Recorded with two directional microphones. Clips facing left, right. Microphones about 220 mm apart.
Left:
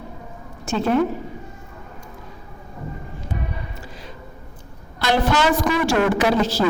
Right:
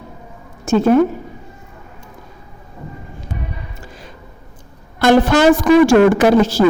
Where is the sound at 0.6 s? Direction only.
45° right (ahead or behind).